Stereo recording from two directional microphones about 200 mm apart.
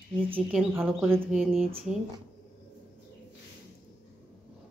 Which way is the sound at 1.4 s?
Centre (ahead or behind).